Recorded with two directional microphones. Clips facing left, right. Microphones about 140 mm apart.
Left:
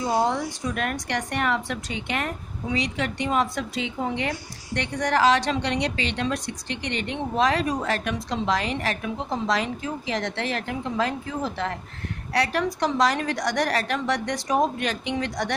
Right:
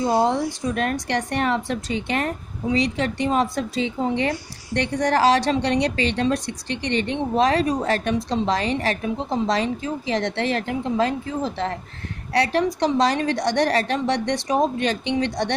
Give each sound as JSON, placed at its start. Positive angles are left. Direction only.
{"t": 0.0, "sound": "a woman's voice", "side_deg": -30}